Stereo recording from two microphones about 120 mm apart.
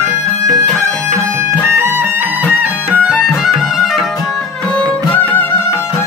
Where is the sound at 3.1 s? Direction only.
Centre (ahead or behind).